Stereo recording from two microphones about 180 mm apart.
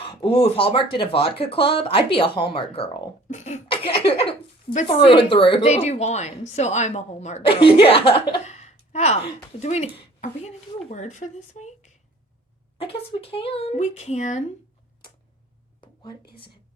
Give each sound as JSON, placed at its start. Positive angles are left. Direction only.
{"t": 0.0, "sound": "a woman's voice", "side_deg": 30}